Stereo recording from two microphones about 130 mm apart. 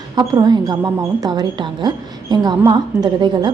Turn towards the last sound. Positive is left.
turn(degrees=-35)  # may be behind; listen again after turning